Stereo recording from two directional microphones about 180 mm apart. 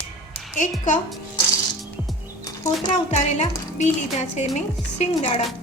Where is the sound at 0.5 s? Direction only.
45° left (ahead or behind).